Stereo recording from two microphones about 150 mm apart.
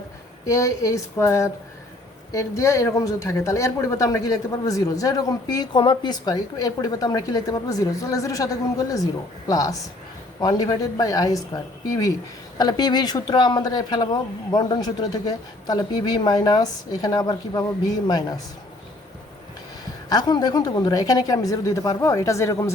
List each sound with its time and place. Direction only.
0.4 s speech: 20° left (ahead or behind)
20.1 s speech: 25° left (ahead or behind)